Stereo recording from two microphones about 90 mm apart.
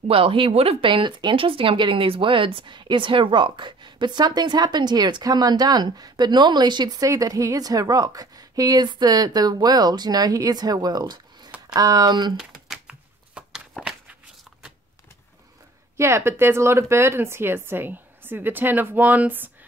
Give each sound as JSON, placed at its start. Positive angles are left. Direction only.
{"t": 0.1, "sound": "speech", "side_deg": -85}
{"t": 12.8, "sound": "a sound", "side_deg": -5}
{"t": 16.0, "sound": "speech", "side_deg": -30}